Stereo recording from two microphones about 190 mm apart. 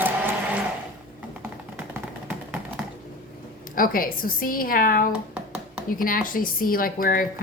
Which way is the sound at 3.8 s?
50° left (ahead or behind).